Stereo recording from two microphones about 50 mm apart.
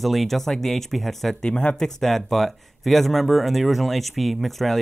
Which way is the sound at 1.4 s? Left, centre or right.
Left.